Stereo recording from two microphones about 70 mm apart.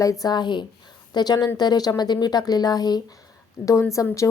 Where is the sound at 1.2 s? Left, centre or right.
Left.